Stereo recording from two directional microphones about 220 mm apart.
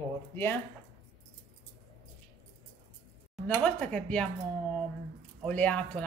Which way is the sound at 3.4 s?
5° left (ahead or behind).